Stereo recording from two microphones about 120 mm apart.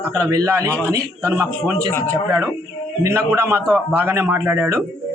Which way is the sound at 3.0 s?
25° right (ahead or behind).